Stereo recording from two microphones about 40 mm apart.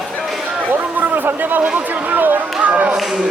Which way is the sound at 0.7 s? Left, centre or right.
Right.